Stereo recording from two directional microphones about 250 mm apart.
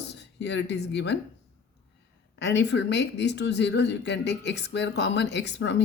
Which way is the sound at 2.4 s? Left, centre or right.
Left.